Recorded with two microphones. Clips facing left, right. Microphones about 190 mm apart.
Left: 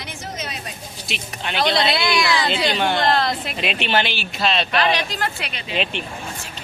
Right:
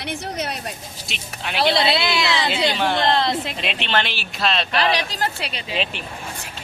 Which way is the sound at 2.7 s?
Centre (ahead or behind).